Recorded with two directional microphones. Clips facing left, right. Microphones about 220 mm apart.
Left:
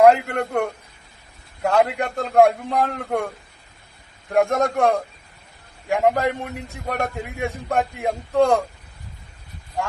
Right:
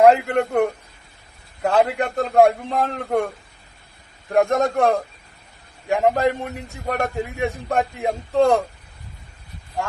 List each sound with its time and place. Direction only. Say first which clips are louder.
0.0 s a man's voice: right 1 dB; centre (ahead or behind)
4.4 s a man's voice: right 1 dB; centre (ahead or behind)